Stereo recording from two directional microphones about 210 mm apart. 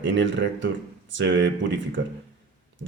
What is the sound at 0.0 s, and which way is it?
Speech, 60° right (ahead or behind).